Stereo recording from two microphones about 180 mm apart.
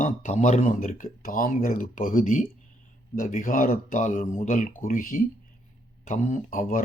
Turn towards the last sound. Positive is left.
turn(degrees=50)  # may be behind; listen again after turning